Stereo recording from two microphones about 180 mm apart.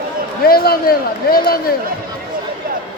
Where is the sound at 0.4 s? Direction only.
60° left (ahead or behind).